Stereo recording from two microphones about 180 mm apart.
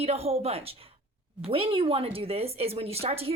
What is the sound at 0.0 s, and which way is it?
Speech, 35° right (ahead or behind).